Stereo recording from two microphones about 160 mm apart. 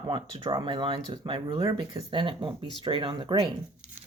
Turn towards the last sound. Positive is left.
turn(degrees=-30)  # may be behind; listen again after turning